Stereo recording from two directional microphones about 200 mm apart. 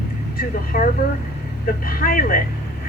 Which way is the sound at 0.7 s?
45° left (ahead or behind).